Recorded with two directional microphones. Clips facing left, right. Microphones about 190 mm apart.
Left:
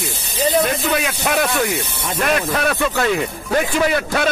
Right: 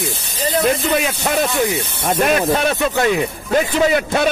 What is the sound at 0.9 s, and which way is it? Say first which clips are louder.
Speech: right 1 dB; 25° right (ahead or behind).